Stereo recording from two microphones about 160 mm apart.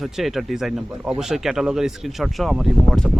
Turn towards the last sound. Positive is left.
turn(degrees=0)  # may be behind; listen again after turning